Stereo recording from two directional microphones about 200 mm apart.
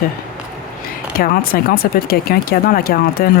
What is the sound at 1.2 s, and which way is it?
Speech, 45° left (ahead or behind).